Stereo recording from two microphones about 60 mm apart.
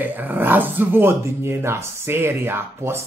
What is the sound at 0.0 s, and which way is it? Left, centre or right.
Speech, right.